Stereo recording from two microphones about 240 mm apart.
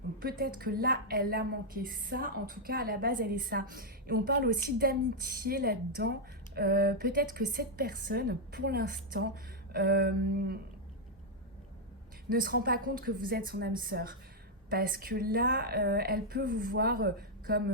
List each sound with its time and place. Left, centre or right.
0.2 s a woman's voice: right
12.3 s a woman's voice: right